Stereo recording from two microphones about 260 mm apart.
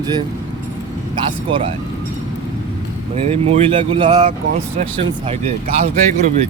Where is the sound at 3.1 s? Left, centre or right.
Right.